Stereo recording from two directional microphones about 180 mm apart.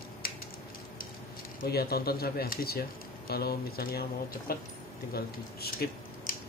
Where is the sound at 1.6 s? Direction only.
60° left (ahead or behind).